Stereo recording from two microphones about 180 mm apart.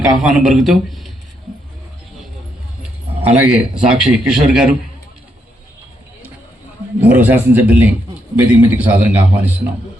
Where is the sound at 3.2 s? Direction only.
10° right (ahead or behind).